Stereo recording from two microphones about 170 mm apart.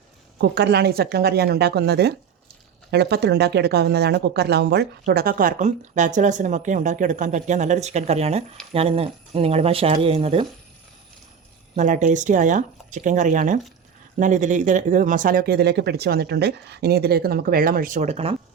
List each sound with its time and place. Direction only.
0.3 s speech: 75° right (ahead or behind); by 10.4 s 35° right (ahead or behind)
11.8 s speech: 45° right (ahead or behind)